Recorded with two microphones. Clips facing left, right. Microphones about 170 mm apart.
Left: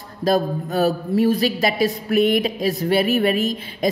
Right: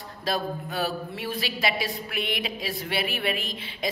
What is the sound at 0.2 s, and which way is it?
A woman's voice, 45° left (ahead or behind).